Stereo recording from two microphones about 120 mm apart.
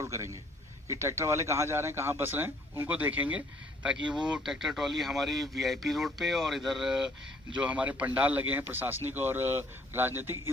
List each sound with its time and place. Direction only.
0.0 s a man's voice: 25° right (ahead or behind)